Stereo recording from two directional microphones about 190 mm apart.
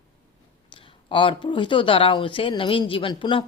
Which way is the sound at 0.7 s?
25° left (ahead or behind).